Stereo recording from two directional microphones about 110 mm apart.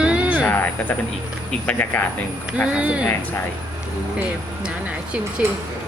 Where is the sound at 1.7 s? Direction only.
15° left (ahead or behind).